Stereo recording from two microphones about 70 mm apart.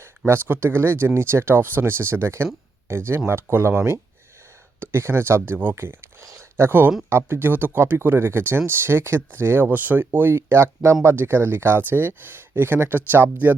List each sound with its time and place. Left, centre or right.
0.3 s speech: right